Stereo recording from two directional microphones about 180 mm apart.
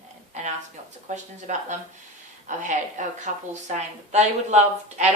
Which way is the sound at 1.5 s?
45° right (ahead or behind).